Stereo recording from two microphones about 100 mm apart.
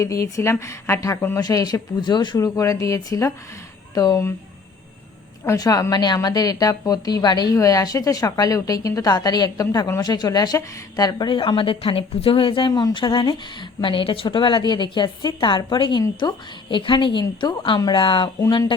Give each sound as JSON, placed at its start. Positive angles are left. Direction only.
{"t": 0.0, "sound": "a woman's voice", "side_deg": 35}
{"t": 1.4, "sound": "a woman's voice", "side_deg": 40}
{"t": 2.6, "sound": "a woman's voice", "side_deg": 35}
{"t": 5.5, "sound": "a woman's voice", "side_deg": 40}